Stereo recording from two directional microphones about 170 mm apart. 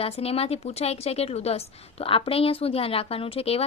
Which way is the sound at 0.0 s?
35° left (ahead or behind).